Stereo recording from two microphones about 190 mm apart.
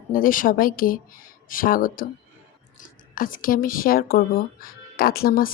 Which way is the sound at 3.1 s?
45° left (ahead or behind).